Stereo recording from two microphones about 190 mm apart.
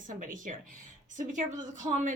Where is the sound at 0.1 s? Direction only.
45° right (ahead or behind).